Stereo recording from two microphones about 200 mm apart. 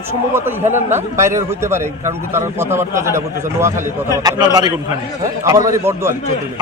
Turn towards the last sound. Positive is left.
turn(degrees=-15)  # may be behind; listen again after turning